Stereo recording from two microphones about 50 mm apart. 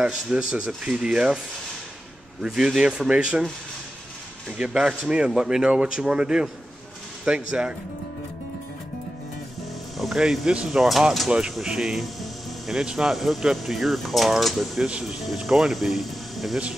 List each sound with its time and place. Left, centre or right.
0.0 s speech: centre
2.4 s speech: centre
4.5 s speech: centre
9.9 s speech: centre
10.8 s speech: centre
11.2 s speech: centre
11.6 s music: centre
12.8 s speech: centre
13.1 s speech: centre